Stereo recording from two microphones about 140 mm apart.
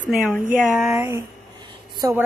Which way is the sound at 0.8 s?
20° right (ahead or behind).